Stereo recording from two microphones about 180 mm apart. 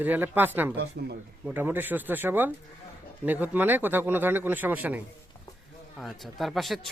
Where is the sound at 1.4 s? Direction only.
10° right (ahead or behind).